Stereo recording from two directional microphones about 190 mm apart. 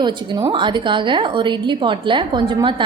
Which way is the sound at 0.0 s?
25° right (ahead or behind).